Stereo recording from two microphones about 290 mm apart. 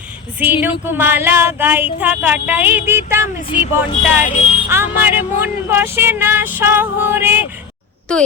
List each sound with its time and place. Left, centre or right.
0.3 s speech: centre
3.5 s music: centre
4.7 s speech: centre
8.1 s speech: centre